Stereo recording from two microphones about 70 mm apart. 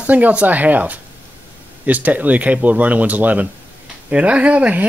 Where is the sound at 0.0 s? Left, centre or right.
Right.